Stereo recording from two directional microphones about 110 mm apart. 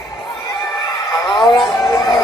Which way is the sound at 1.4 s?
40° left (ahead or behind).